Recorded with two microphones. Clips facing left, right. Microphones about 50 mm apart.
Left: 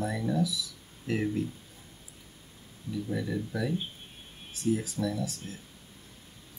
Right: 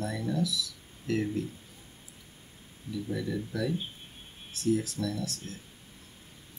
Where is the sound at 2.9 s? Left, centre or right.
Centre.